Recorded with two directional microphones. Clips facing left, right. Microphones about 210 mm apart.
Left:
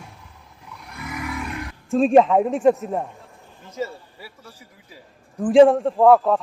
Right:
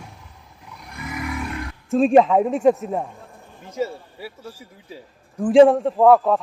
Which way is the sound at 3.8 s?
15° right (ahead or behind).